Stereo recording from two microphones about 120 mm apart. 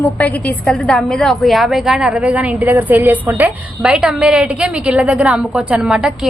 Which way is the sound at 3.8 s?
5° right (ahead or behind).